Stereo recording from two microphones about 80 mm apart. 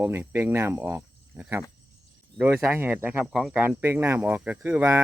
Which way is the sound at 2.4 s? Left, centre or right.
Right.